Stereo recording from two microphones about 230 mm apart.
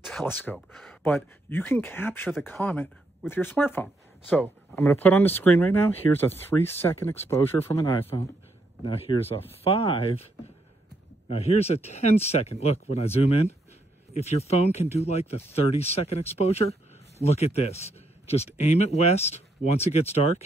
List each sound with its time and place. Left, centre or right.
0.0 s speech: centre
8.8 s speech: left
11.2 s speech: left